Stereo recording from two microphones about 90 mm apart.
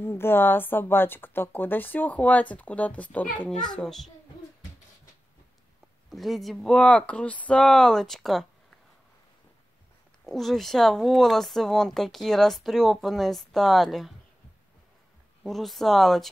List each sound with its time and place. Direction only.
0.0 s a child's voice: 25° left (ahead or behind); by 4.1 s 5° left (ahead or behind)
6.0 s speech: centre (ahead or behind)
10.2 s speech: centre (ahead or behind)
15.4 s speech: centre (ahead or behind)